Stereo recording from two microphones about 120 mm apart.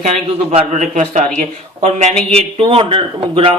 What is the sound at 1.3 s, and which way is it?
Speech, 70° right (ahead or behind).